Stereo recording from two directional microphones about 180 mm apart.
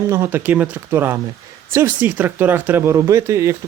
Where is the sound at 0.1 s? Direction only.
15° right (ahead or behind).